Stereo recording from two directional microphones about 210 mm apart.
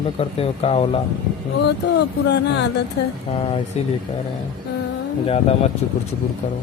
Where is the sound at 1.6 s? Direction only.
55° left (ahead or behind).